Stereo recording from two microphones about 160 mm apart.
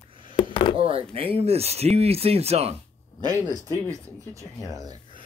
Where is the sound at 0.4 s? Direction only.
30° left (ahead or behind).